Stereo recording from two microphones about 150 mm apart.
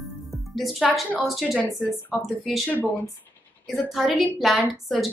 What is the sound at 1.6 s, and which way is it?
Speech, 20° left (ahead or behind).